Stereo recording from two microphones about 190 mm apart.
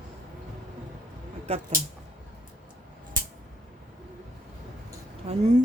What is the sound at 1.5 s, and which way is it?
Speech, 35° right (ahead or behind).